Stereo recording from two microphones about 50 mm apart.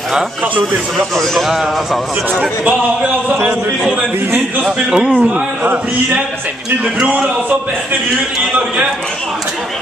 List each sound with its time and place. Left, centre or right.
1.3 s a man's voice: centre
4.6 s a man's voice: centre
5.1 s a man's voice: right
7.1 s a man's voice: right